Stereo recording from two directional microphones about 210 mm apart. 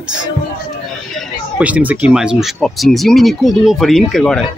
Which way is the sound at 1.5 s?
5° right (ahead or behind).